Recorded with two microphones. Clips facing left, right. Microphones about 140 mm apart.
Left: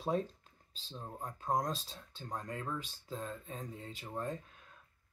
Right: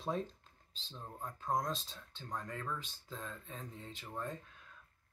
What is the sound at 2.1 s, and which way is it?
Speech, 30° left (ahead or behind).